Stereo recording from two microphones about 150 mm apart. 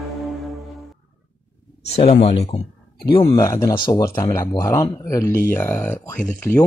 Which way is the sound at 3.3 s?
20° left (ahead or behind).